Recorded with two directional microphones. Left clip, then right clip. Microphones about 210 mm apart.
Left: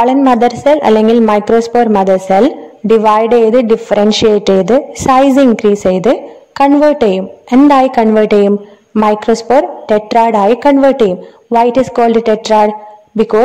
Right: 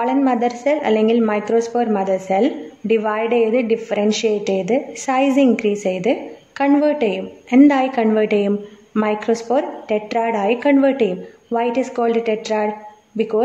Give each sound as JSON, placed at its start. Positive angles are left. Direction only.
{"t": 0.0, "sound": "a woman's voice", "side_deg": 40}